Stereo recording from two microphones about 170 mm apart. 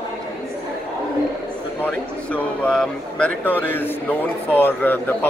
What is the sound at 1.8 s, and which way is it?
A man's voice, 10° left (ahead or behind).